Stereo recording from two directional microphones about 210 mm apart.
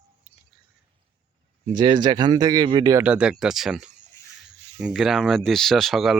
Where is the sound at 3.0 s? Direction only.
5° right (ahead or behind).